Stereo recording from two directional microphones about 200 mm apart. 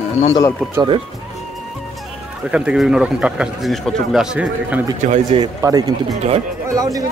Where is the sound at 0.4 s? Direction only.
15° left (ahead or behind).